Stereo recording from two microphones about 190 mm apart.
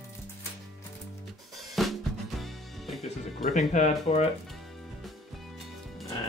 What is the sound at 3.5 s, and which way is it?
Speech, 40° left (ahead or behind).